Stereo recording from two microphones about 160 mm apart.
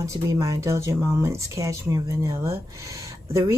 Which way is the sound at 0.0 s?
20° right (ahead or behind).